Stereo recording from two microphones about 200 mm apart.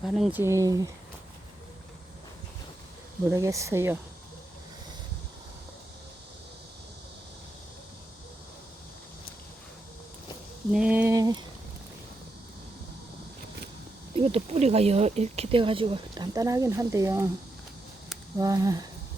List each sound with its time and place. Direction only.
0.1 s speech: 5° right (ahead or behind)
3.2 s speech: 15° right (ahead or behind)
10.7 s speech: 5° right (ahead or behind)
14.2 s speech: 30° right (ahead or behind); by 17.2 s 15° right (ahead or behind)
18.3 s speech: 15° right (ahead or behind)